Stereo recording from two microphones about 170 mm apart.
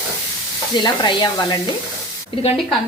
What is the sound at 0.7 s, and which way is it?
Speech, 25° left (ahead or behind).